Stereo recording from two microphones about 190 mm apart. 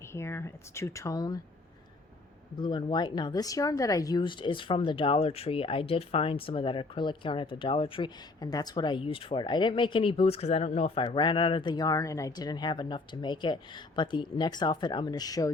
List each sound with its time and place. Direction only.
0.1 s speech: 15° left (ahead or behind)
2.6 s speech: 25° left (ahead or behind)